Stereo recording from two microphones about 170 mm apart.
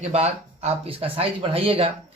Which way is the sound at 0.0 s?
40° right (ahead or behind).